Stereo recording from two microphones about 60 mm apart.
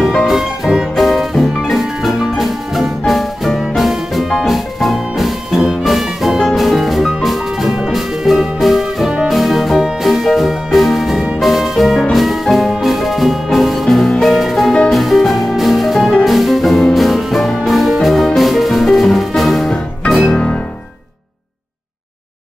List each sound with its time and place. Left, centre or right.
0.2 s music: centre
20.2 s music: centre